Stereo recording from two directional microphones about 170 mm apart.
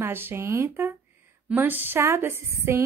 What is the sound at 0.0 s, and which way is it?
A woman's voice, 15° right (ahead or behind).